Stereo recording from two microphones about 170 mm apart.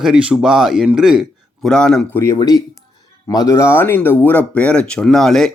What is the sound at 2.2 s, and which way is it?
Speech, 20° left (ahead or behind).